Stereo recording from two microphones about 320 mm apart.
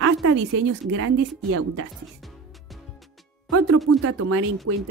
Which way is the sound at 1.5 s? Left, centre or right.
Right.